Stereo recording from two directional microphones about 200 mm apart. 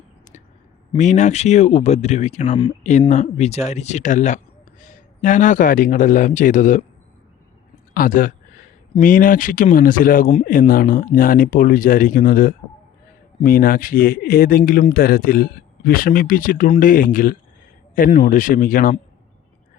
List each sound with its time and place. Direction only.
0.9 s a man's voice: 35° left (ahead or behind)
7.9 s speech: 45° left (ahead or behind)